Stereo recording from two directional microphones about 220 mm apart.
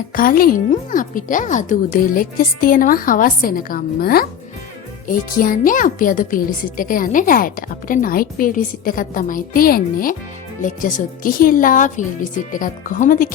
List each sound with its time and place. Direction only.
0.1 s speech: 40° left (ahead or behind)